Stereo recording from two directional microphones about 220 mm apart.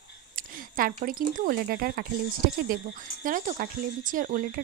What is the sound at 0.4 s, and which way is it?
Speech, 40° right (ahead or behind).